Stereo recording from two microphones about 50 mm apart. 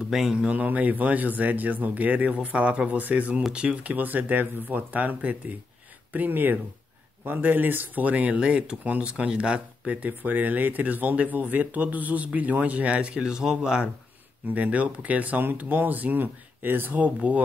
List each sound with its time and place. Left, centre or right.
0.1 s speech: centre
0.5 s speech: right; by 13.8 s centre
14.5 s speech: right
17.0 s speech: right